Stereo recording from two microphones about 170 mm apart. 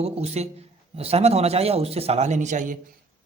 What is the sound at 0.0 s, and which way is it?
A man's voice, 40° right (ahead or behind).